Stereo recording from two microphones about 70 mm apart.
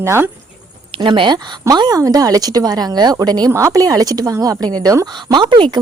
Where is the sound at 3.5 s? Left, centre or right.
Right.